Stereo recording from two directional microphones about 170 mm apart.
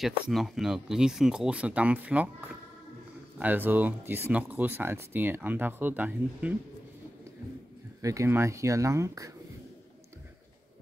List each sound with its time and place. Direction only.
0.0 s speech: centre (ahead or behind)
8.0 s speech: 20° right (ahead or behind)